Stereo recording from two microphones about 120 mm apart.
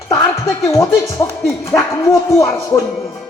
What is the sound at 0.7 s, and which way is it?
Speech, 25° left (ahead or behind).